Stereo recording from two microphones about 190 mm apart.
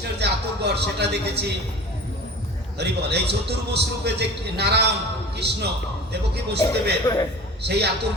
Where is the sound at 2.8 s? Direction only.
60° right (ahead or behind).